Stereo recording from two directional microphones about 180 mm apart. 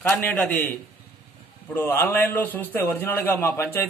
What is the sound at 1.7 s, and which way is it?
A man's voice, 15° left (ahead or behind).